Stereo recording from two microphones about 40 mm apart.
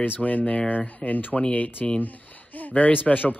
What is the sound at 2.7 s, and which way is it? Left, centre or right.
Speech, left.